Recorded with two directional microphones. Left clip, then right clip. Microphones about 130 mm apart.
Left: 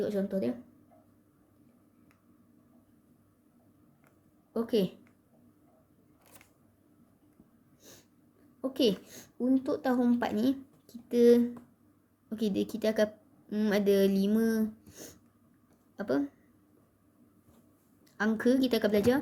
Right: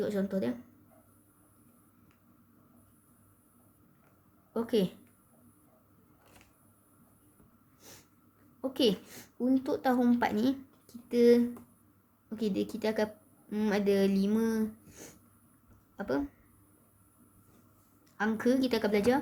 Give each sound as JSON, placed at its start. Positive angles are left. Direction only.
{"t": 0.0, "sound": "a woman's voice", "side_deg": 0}
{"t": 4.5, "sound": "a woman's voice", "side_deg": 0}
{"t": 7.8, "sound": "snort", "side_deg": -10}
{"t": 8.6, "sound": "a woman's voice", "side_deg": 0}
{"t": 18.2, "sound": "a woman's voice", "side_deg": 10}